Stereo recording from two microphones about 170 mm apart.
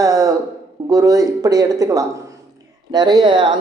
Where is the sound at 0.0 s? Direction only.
20° right (ahead or behind).